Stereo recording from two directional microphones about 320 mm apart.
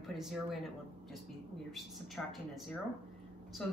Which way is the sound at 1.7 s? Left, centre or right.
Centre.